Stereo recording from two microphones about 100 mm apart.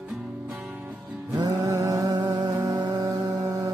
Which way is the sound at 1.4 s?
35° right (ahead or behind).